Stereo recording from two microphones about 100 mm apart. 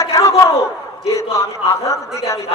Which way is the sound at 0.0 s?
35° left (ahead or behind).